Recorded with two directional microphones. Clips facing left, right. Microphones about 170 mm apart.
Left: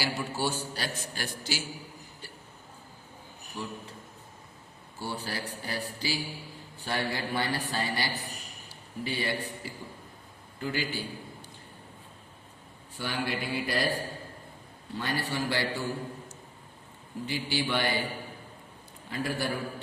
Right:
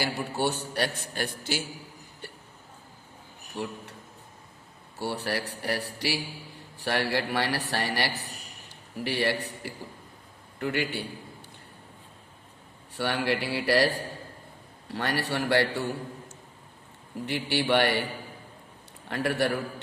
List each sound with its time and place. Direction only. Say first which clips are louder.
0.0 s a man's voice: right 3 dB; 60° right (ahead or behind)
2.2 s hiccup: right 6 dB; 60° right (ahead or behind)
3.6 s a man's voice: right 4 dB; 65° right (ahead or behind)
4.9 s a man's voice: right 5 dB; 70° right (ahead or behind)
12.9 s a man's voice: right 5 dB; 70° right (ahead or behind)
17.2 s a man's voice: right 4 dB; 65° right (ahead or behind)
19.0 s a man's voice: right 5 dB; 70° right (ahead or behind)